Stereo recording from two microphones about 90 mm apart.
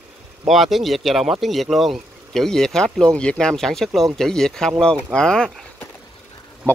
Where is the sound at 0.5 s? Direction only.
Centre (ahead or behind).